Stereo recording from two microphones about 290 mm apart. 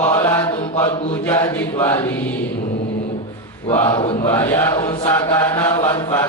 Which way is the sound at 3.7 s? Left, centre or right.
Centre.